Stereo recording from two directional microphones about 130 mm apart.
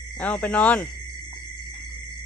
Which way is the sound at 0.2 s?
10° left (ahead or behind).